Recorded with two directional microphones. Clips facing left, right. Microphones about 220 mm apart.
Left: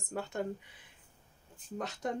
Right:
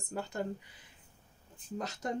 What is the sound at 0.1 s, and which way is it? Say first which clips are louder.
Speech: left 1 dB; centre (ahead or behind).